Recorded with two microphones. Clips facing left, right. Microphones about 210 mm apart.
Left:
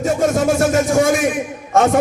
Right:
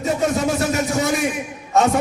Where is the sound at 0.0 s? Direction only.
50° left (ahead or behind).